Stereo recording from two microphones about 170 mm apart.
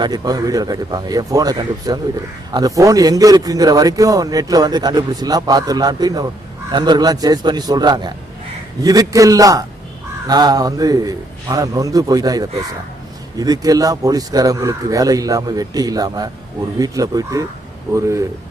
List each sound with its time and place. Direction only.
0.0 s a man's voice: 25° right (ahead or behind)